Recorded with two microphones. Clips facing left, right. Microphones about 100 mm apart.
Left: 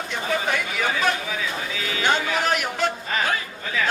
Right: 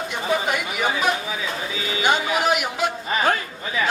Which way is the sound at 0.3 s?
15° right (ahead or behind).